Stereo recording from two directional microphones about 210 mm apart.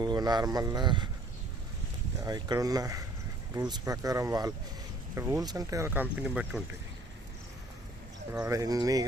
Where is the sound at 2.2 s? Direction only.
20° right (ahead or behind).